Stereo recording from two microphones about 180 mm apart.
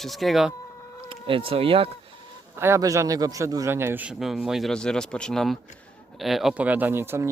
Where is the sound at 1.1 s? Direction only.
30° right (ahead or behind).